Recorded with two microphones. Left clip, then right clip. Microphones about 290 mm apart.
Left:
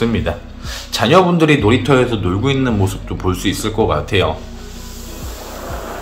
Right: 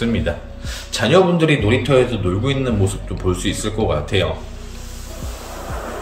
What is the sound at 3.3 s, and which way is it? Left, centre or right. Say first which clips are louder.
Speech: left 3 dB; centre.